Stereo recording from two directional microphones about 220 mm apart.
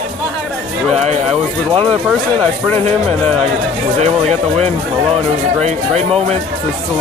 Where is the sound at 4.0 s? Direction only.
30° right (ahead or behind).